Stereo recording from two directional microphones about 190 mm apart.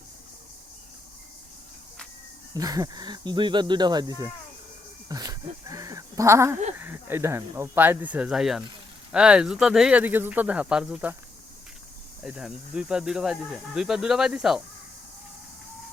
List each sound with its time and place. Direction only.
2.6 s speech: 20° right (ahead or behind); by 11.1 s 5° right (ahead or behind)
12.2 s speech: centre (ahead or behind)